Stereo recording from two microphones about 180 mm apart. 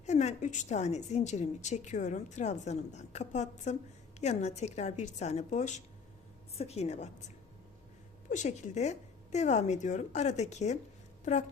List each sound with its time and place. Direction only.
0.0 s a woman's voice: 40° left (ahead or behind)
8.3 s a woman's voice: 40° left (ahead or behind)